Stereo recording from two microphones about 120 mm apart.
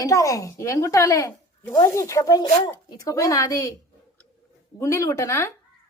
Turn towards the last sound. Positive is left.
turn(degrees=25)  # may be behind; listen again after turning